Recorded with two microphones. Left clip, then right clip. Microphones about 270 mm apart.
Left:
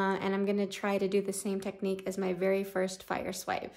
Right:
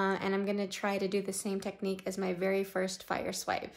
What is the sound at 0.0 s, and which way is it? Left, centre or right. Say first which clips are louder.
Speech: left 1 dB; centre.